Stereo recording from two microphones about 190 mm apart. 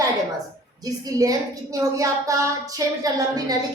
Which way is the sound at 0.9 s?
20° right (ahead or behind).